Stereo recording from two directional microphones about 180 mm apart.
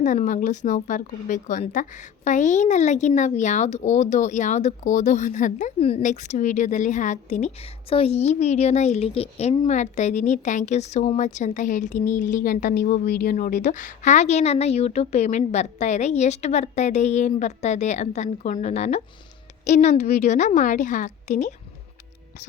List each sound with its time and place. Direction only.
0.0 s speech: 45° left (ahead or behind)